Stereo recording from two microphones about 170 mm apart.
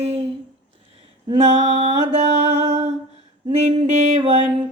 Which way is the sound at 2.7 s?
40° right (ahead or behind).